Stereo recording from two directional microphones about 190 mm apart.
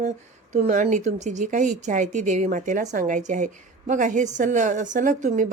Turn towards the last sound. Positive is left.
turn(degrees=-40)  # may be behind; listen again after turning